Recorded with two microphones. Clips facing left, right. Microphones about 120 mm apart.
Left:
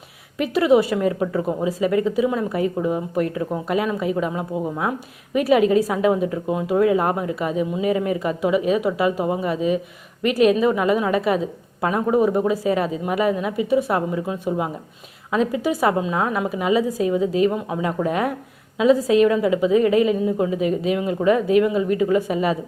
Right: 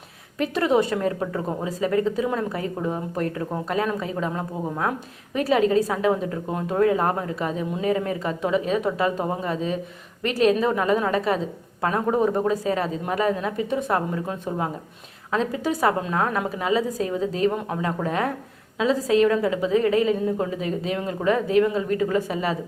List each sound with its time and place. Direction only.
0.3 s a woman's voice: 10° left (ahead or behind)